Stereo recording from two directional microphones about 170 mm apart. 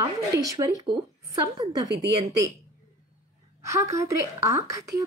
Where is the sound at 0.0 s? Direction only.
20° right (ahead or behind).